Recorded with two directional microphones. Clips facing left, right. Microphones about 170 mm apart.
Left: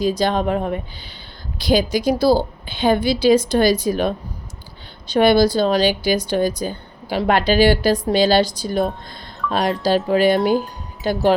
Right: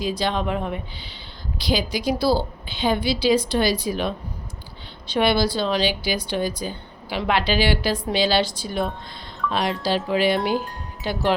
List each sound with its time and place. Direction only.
0.0 s speech: 45° left (ahead or behind)